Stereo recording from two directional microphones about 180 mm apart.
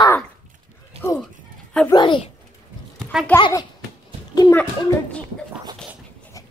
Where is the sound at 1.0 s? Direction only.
35° right (ahead or behind).